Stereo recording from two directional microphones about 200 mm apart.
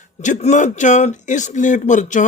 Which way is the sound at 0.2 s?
35° left (ahead or behind).